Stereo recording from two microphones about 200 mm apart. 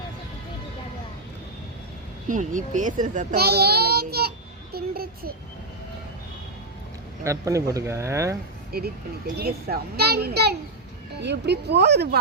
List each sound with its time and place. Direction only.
2.2 s a child's voice: 40° right (ahead or behind)
7.3 s speech: 15° right (ahead or behind)
8.7 s a child's voice: 50° right (ahead or behind)